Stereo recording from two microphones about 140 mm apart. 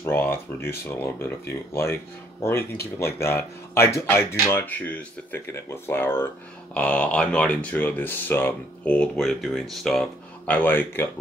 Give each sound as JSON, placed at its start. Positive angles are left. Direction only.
{"t": 0.0, "sound": "speech", "side_deg": 15}